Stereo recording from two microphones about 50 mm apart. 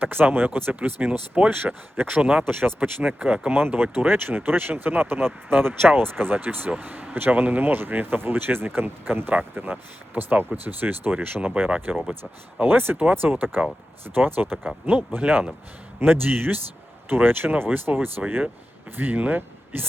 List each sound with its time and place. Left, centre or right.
0.0 s speech: right
3.6 s speech: right